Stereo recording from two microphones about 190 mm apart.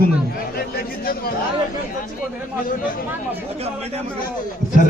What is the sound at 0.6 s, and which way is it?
Chatter, 50° left (ahead or behind).